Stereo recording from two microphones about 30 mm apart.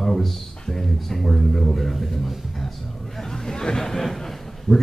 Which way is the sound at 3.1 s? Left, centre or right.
Centre.